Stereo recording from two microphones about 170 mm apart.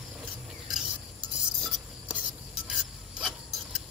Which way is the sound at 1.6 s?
Centre (ahead or behind).